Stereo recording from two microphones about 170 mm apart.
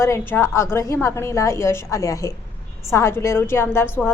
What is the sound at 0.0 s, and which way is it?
A woman's voice, 15° left (ahead or behind).